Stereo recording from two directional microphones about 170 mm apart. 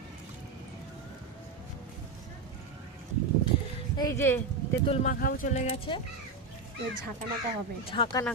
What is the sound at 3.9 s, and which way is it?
Speech, 20° left (ahead or behind).